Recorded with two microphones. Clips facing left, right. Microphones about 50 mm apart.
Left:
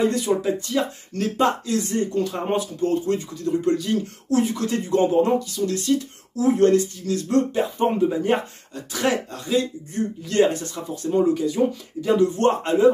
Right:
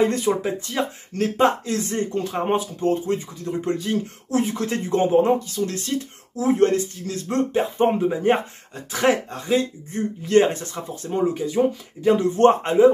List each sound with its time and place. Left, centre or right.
0.0 s speech: right